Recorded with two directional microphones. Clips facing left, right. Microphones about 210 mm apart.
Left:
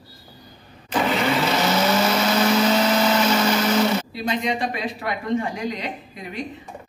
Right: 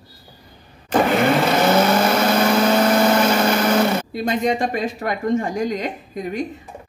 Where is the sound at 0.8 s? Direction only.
50° right (ahead or behind).